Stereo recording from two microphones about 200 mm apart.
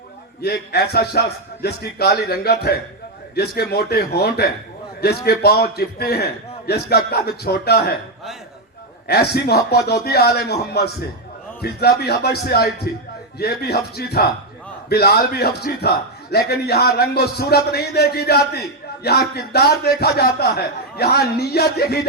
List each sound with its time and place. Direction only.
0.4 s a man's voice: 55° left (ahead or behind)
9.0 s a man's voice: 55° left (ahead or behind)